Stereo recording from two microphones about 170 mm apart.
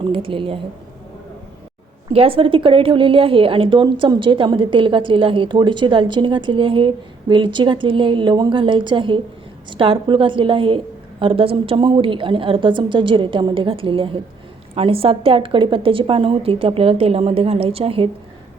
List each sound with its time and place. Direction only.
0.1 s a woman's voice: 30° right (ahead or behind)
2.0 s a woman's voice: 30° right (ahead or behind)